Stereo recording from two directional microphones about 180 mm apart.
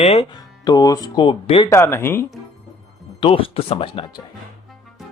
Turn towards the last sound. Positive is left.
turn(degrees=30)  # may be behind; listen again after turning